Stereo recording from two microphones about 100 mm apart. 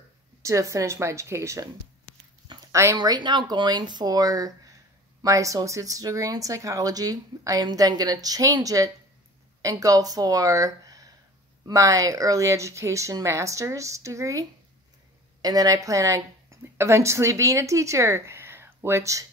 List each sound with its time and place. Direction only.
0.4 s speech: 30° right (ahead or behind)
2.7 s speech: 30° right (ahead or behind)
3.0 s speech: 50° right (ahead or behind); by 14.4 s 30° right (ahead or behind)
15.4 s speech: 40° right (ahead or behind)